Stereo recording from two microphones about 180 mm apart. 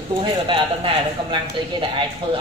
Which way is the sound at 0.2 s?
30° right (ahead or behind).